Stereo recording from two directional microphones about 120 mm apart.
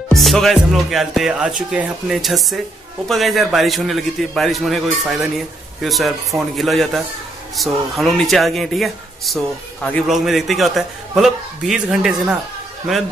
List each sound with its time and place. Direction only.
0.1 s speech: centre (ahead or behind)